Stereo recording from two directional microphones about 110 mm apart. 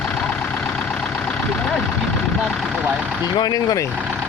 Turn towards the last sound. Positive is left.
turn(degrees=35)  # may be behind; listen again after turning